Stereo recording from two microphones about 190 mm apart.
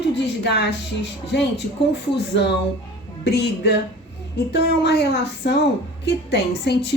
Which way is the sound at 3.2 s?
60° left (ahead or behind).